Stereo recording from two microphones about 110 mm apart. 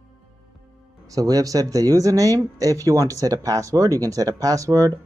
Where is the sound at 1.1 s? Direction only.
35° right (ahead or behind).